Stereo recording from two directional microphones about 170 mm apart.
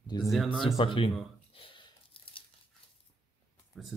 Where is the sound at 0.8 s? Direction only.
30° left (ahead or behind).